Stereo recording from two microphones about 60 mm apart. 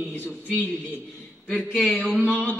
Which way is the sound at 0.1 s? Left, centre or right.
Left.